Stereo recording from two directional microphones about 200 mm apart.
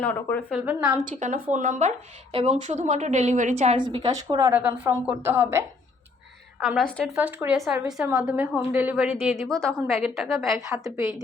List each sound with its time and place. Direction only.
0.0 s a woman's voice: 10° left (ahead or behind)
0.5 s a woman's voice: 5° right (ahead or behind)
1.1 s a woman's voice: 35° right (ahead or behind); by 5.6 s 15° right (ahead or behind)
6.6 s a woman's voice: centre (ahead or behind)
7.2 s a woman's voice: 10° right (ahead or behind)
10.8 s a woman's voice: 15° right (ahead or behind)